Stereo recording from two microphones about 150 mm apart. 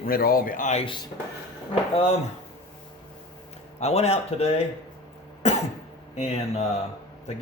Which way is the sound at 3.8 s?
45° left (ahead or behind).